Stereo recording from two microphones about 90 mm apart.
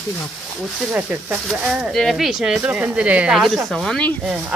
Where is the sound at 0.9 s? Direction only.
15° right (ahead or behind).